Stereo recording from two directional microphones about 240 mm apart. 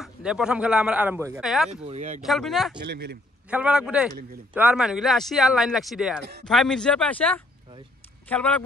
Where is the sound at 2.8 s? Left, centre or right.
Right.